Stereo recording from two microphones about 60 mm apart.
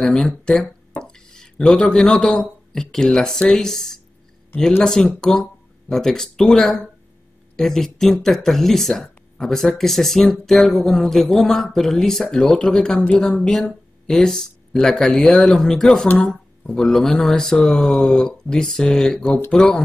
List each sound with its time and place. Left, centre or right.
0.0 s speech: centre
13.1 s speech: left
13.4 s speech: centre
16.1 s speech: left
16.6 s speech: centre